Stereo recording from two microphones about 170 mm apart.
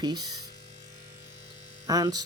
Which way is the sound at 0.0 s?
25° right (ahead or behind).